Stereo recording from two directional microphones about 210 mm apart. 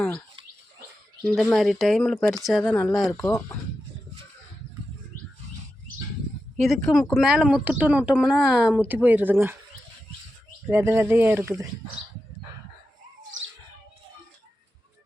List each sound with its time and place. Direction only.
1.2 s speech: 5° left (ahead or behind)
3.2 s speech: 15° left (ahead or behind)
6.6 s speech: centre (ahead or behind)
10.7 s speech: 10° right (ahead or behind)